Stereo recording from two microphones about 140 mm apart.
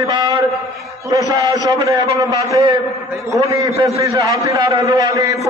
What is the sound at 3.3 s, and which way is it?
A man's voice, 25° right (ahead or behind).